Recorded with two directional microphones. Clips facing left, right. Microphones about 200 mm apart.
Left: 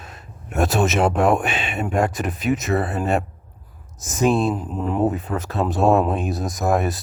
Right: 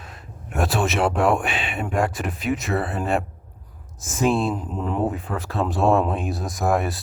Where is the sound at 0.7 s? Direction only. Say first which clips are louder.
Left 2 dB; 20° left (ahead or behind).